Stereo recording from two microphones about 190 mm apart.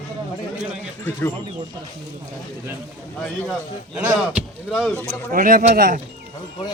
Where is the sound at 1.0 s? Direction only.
10° left (ahead or behind).